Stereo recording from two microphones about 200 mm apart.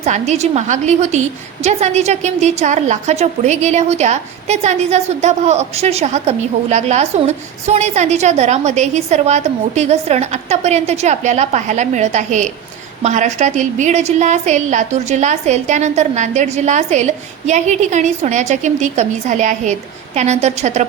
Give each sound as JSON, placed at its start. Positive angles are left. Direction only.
{"t": 0.0, "sound": "a woman's voice", "side_deg": -35}